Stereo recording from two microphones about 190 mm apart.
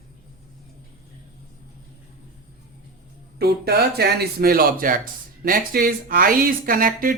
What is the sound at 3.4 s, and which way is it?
Speech, 55° right (ahead or behind).